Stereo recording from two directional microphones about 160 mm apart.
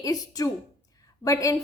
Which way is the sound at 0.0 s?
20° left (ahead or behind).